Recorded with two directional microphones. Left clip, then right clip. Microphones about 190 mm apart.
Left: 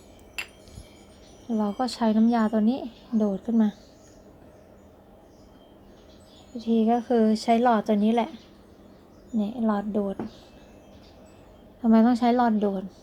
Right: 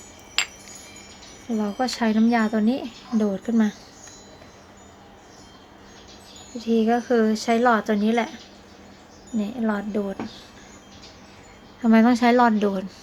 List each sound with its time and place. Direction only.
1.5 s a woman's voice: centre (ahead or behind)
2.4 s a woman's voice: 25° right (ahead or behind)
2.6 s a woman's voice: centre (ahead or behind)
6.6 s speech: 5° left (ahead or behind)
9.4 s a woman's voice: 5° left (ahead or behind)
11.9 s a woman's voice: 10° right (ahead or behind)